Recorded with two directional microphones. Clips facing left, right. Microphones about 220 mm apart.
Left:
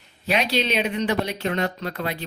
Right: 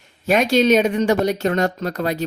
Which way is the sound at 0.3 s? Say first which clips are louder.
Right 8 dB; 45° right (ahead or behind).